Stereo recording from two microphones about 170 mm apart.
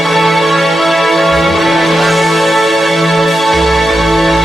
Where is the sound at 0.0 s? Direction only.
Centre (ahead or behind).